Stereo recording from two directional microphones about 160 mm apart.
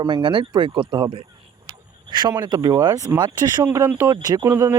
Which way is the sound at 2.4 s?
30° right (ahead or behind).